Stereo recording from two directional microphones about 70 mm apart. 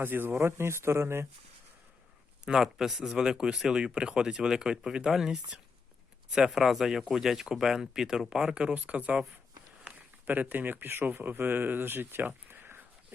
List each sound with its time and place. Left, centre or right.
0.0 s speech: right
2.4 s speech: centre; by 13.1 s right